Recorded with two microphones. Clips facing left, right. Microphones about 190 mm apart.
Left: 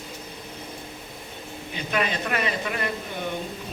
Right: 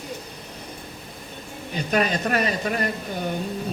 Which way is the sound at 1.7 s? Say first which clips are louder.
Right 4 dB; 40° right (ahead or behind).